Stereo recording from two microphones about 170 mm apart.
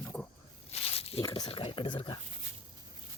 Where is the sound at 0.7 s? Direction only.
35° left (ahead or behind).